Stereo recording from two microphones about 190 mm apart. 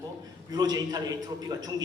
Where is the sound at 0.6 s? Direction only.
20° right (ahead or behind).